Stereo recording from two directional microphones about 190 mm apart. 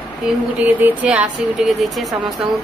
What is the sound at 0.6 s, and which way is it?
Speech, 10° right (ahead or behind).